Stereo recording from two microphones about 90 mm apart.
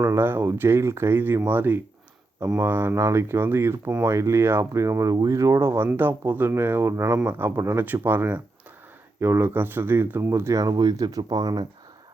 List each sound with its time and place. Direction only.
0.0 s speech: 30° right (ahead or behind); by 11.6 s 45° right (ahead or behind)